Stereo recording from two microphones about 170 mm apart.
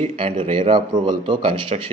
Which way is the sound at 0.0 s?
30° right (ahead or behind).